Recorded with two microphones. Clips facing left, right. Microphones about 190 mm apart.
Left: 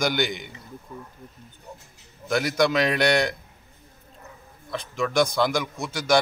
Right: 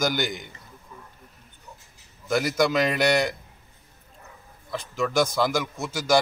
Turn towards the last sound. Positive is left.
turn(degrees=-5)  # may be behind; listen again after turning